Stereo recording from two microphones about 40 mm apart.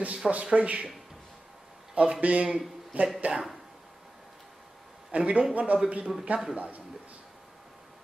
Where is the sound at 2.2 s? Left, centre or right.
Right.